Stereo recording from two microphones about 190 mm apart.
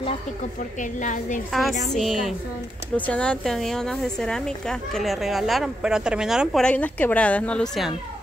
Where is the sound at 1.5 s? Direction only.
Centre (ahead or behind).